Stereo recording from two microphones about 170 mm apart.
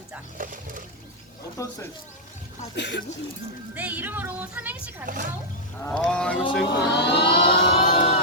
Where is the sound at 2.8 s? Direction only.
90° left.